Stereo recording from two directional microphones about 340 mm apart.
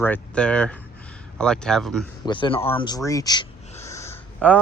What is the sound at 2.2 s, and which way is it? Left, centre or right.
Speech, centre.